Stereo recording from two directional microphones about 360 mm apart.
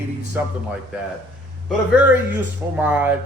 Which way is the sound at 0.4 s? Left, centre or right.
Centre.